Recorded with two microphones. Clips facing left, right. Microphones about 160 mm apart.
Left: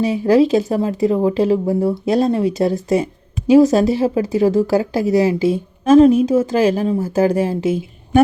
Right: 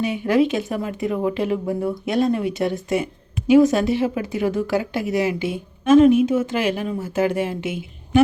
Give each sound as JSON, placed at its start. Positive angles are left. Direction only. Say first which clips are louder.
{"t": 0.0, "sound": "speech", "louder": "left 5 dB", "side_deg": 35}